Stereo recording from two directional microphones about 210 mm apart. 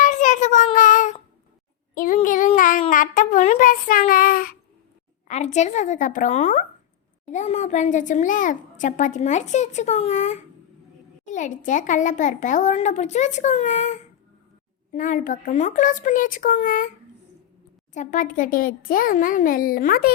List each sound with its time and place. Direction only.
0.0 s child singing: 35° left (ahead or behind)
5.3 s a woman's voice: 35° left (ahead or behind)
14.9 s a woman's voice: 40° left (ahead or behind)
17.9 s a woman's voice: 35° left (ahead or behind)